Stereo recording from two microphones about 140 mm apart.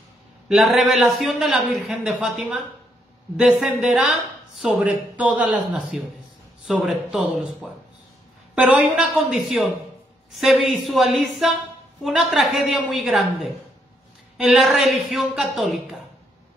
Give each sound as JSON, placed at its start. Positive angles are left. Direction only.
{"t": 0.5, "sound": "speech", "side_deg": -5}
{"t": 8.5, "sound": "speech", "side_deg": -5}